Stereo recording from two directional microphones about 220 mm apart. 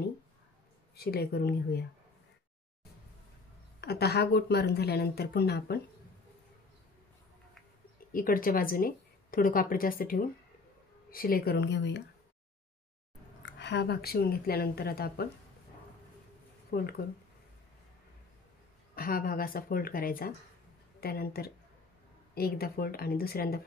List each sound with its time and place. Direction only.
0.9 s a woman's voice: 45° left (ahead or behind)
3.8 s a woman's voice: 45° left (ahead or behind)
8.1 s a woman's voice: 40° left (ahead or behind)
13.4 s a woman's voice: 55° left (ahead or behind)
16.7 s a woman's voice: 45° left (ahead or behind)
18.9 s a woman's voice: 40° left (ahead or behind)